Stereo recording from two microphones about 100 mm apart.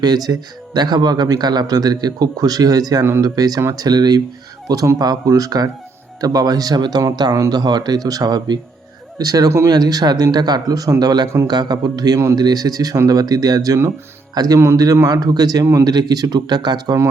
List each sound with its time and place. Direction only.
0.0 s speech: 40° right (ahead or behind)
9.7 s speech: 40° right (ahead or behind)